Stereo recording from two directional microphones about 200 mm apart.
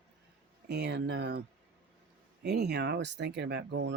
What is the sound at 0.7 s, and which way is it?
Speech, 55° right (ahead or behind).